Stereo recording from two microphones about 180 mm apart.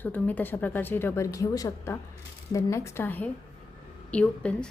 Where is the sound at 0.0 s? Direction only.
10° left (ahead or behind).